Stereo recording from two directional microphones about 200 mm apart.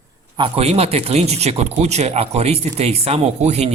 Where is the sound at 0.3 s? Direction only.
25° right (ahead or behind).